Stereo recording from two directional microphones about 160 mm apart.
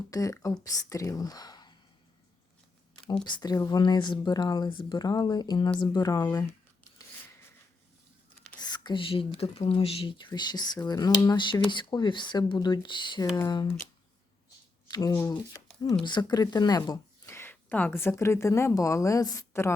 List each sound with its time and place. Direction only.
0.1 s speech: 20° left (ahead or behind)
3.2 s speech: 25° left (ahead or behind)
8.5 s speech: 25° left (ahead or behind)
14.8 s speech: 25° left (ahead or behind)
17.3 s a woman's voice: 15° left (ahead or behind)